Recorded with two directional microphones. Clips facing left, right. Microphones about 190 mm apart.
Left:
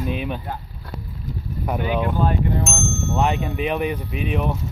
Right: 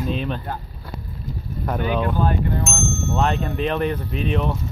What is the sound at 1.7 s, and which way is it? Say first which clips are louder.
Speech: even; 10° left (ahead or behind).